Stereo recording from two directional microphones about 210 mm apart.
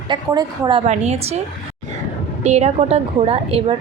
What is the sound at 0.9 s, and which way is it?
Speech, 30° right (ahead or behind).